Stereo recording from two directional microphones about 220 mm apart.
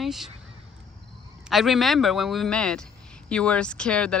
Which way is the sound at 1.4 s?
Centre (ahead or behind).